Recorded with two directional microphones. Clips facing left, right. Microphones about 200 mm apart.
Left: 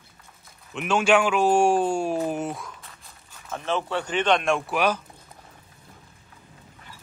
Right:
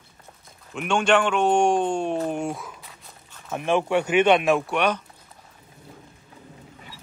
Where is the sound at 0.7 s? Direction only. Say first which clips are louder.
Even; 5° left (ahead or behind).